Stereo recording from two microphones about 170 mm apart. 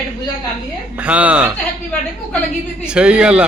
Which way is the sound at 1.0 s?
10° right (ahead or behind).